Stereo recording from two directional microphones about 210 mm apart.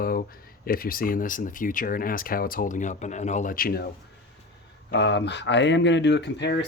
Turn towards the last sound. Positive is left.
turn(degrees=55)  # may be behind; listen again after turning